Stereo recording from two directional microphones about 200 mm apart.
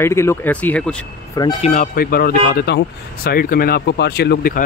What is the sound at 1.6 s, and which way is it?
Speech, 40° left (ahead or behind).